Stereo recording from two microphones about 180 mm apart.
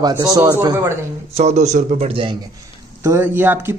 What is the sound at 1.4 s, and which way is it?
A man's voice, 40° right (ahead or behind).